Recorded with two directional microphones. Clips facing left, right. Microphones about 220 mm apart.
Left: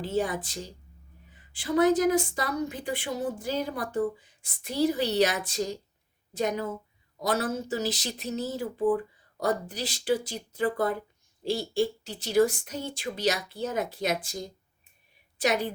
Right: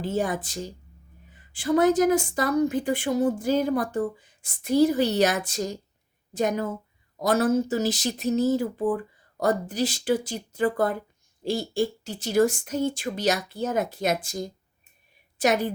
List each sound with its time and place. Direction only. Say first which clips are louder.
0.1 s speech: right 1 dB; 50° right (ahead or behind)